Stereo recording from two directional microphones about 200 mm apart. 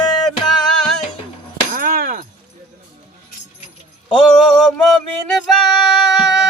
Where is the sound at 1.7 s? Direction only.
45° right (ahead or behind).